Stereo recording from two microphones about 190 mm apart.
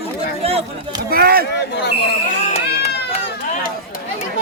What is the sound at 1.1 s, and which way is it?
Speech, 55° right (ahead or behind).